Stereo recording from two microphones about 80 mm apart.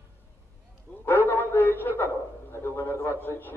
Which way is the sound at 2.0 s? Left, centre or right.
Left.